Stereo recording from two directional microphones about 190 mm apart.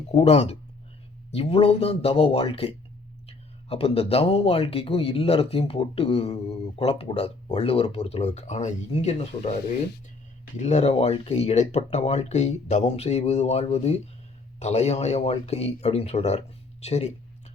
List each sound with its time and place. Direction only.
0.1 s speech: 35° left (ahead or behind)